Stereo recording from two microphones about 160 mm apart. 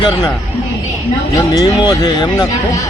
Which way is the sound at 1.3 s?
25° left (ahead or behind).